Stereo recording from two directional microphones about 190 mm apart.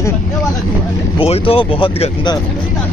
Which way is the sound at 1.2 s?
30° left (ahead or behind).